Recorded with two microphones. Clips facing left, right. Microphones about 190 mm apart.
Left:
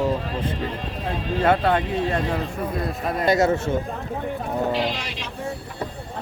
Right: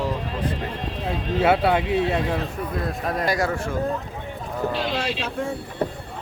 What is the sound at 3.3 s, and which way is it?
Speech, 25° left (ahead or behind).